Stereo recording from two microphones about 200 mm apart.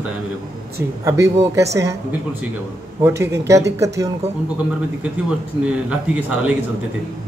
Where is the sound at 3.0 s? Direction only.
15° right (ahead or behind).